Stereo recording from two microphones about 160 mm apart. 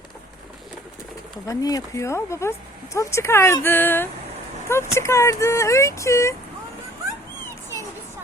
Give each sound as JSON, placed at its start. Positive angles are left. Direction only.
{"t": 1.5, "sound": "speech", "side_deg": 20}